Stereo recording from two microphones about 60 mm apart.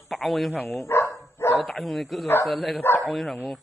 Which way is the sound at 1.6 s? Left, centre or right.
Centre.